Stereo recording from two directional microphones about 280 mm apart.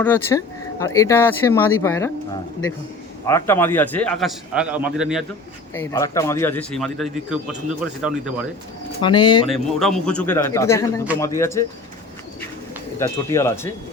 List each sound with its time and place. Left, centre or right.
0.0 s a man's voice: centre
5.7 s a man's voice: centre
9.0 s speech: centre
9.5 s a man's voice: centre
13.0 s speech: centre